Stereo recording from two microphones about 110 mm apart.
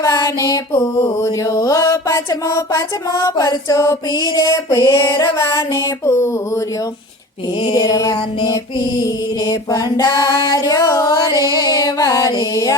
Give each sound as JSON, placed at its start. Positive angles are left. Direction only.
{"t": 0.0, "sound": "music", "side_deg": 30}
{"t": 0.7, "sound": "mantra", "side_deg": 25}
{"t": 5.1, "sound": "music", "side_deg": 25}
{"t": 7.7, "sound": "mantra", "side_deg": 35}
{"t": 9.5, "sound": "mantra", "side_deg": 35}